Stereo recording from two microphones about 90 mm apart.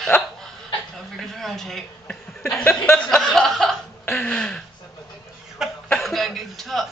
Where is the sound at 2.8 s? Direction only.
10° left (ahead or behind).